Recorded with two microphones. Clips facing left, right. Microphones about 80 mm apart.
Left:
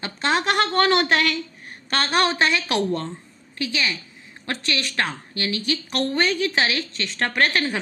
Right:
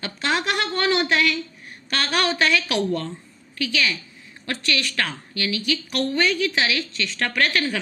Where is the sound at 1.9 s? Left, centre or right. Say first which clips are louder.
Left 2 dB; left.